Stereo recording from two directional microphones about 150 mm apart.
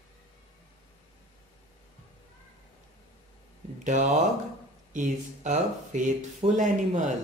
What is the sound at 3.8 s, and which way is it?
Speech, 55° right (ahead or behind).